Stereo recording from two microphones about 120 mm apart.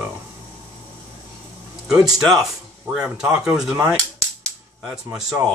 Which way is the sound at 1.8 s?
5° right (ahead or behind).